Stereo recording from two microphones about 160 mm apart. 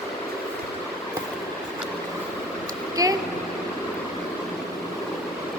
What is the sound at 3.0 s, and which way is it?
Vehicle, 20° right (ahead or behind).